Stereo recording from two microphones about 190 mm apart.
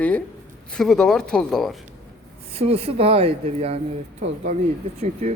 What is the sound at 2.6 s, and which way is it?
Speech, 30° right (ahead or behind).